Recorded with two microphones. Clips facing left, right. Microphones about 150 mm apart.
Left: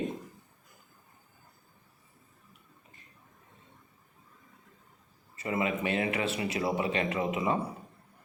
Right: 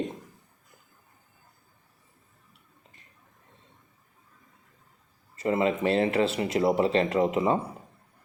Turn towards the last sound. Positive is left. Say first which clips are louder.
# right 6 dB
turn(degrees=-30)  # may be behind; listen again after turning